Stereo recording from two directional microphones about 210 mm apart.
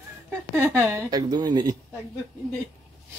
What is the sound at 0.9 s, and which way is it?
Speech, 20° right (ahead or behind).